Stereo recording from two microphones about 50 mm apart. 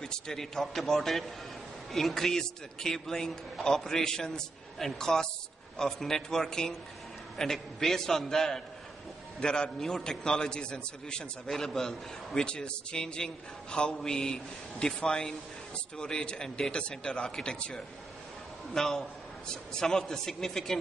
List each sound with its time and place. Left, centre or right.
0.0 s a man's voice: centre